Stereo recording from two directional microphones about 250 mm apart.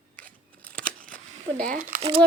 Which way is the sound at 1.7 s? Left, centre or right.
Right.